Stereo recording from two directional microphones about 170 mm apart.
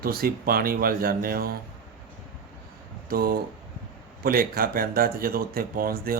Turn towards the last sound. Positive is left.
turn(degrees=-60)  # may be behind; listen again after turning